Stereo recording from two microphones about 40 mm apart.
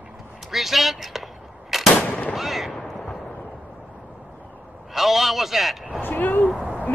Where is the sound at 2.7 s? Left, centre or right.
Centre.